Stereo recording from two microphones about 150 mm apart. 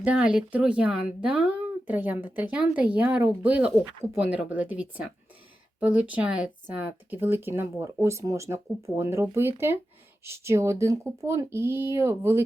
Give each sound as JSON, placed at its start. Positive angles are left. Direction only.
{"t": 0.0, "sound": "speech", "side_deg": -5}